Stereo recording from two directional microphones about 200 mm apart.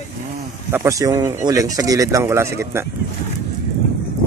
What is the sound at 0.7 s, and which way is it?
Speech, 15° right (ahead or behind).